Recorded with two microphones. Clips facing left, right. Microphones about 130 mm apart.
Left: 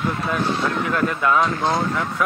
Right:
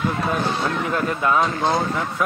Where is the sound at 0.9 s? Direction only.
25° right (ahead or behind).